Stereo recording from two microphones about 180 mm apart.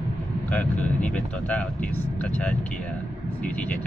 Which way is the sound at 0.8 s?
10° left (ahead or behind).